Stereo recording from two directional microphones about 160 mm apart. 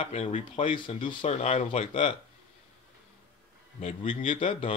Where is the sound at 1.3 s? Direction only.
45° left (ahead or behind).